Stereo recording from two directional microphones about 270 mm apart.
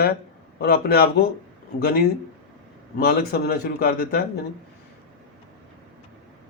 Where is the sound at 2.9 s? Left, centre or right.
Left.